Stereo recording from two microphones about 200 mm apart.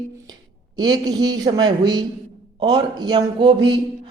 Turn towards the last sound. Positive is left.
turn(degrees=-25)  # may be behind; listen again after turning